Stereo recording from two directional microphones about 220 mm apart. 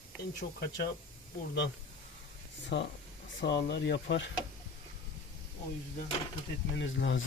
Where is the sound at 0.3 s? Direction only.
50° left (ahead or behind).